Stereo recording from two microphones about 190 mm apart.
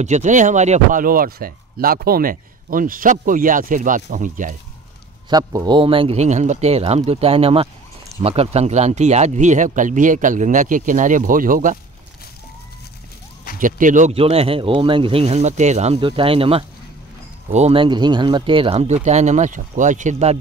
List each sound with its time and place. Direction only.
0.0 s speech: 40° right (ahead or behind)
5.3 s speech: 20° right (ahead or behind); by 11.8 s 45° right (ahead or behind)
13.6 s speech: 45° right (ahead or behind)